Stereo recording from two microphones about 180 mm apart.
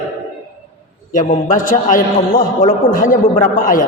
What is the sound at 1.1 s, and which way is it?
A man's voice, 45° left (ahead or behind).